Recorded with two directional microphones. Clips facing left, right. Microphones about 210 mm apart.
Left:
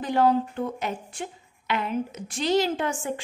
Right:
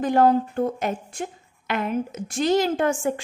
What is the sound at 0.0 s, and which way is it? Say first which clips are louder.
A woman's voice: right 3 dB; 50° right (ahead or behind).